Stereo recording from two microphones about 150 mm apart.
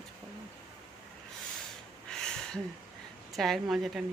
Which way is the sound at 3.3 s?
Centre (ahead or behind).